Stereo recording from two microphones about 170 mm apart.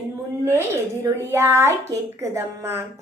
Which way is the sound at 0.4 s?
15° right (ahead or behind).